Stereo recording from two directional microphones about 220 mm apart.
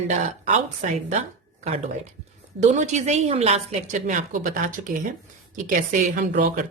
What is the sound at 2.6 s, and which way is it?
A woman's voice, 35° right (ahead or behind).